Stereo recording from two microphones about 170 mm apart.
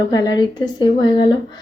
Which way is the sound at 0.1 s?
25° left (ahead or behind).